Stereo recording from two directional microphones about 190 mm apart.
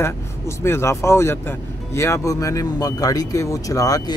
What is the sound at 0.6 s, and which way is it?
Speech, 15° left (ahead or behind).